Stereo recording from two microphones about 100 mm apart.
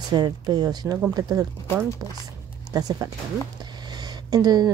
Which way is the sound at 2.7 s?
40° right (ahead or behind).